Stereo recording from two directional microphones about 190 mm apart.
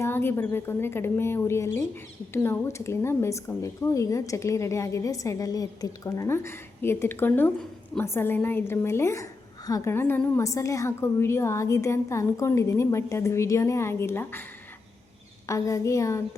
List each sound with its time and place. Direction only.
0.0 s a woman's voice: 10° left (ahead or behind)
15.4 s a woman's voice: 15° left (ahead or behind)